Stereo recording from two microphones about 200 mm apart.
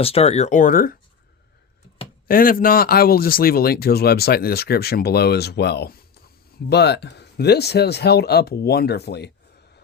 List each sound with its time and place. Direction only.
0.0 s speech: 30° left (ahead or behind); by 0.9 s 45° left (ahead or behind)
2.2 s speech: 45° left (ahead or behind)